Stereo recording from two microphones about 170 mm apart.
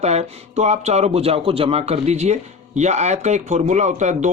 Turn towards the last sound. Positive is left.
turn(degrees=-45)  # may be behind; listen again after turning